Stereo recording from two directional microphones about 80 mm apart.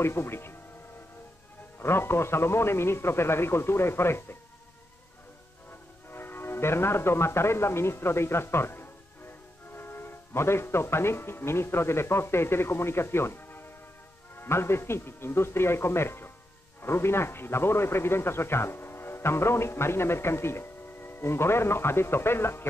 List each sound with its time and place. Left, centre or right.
0.0 s a man's voice: left
1.8 s a man's voice: left
5.7 s a man's voice: left